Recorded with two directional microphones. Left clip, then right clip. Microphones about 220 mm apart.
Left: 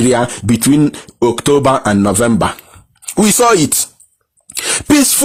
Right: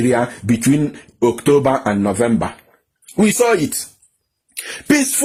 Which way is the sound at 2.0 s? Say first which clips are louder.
Left 5 dB; 40° left (ahead or behind).